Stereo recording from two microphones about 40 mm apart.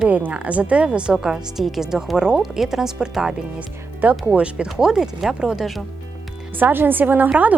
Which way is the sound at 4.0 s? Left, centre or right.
Right.